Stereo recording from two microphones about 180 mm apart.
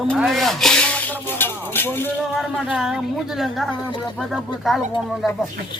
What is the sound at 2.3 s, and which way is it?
A man's voice, 5° right (ahead or behind).